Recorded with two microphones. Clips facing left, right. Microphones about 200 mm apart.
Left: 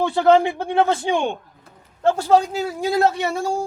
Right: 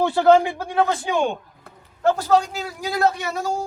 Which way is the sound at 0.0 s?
25° left (ahead or behind).